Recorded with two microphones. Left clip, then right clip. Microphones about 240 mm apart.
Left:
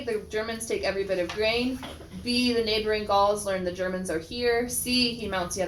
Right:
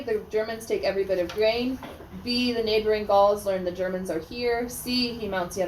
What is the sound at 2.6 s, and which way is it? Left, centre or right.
Speech, centre.